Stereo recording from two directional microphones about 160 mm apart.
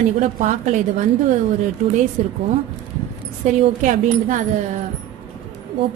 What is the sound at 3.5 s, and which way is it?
Speech, 50° right (ahead or behind).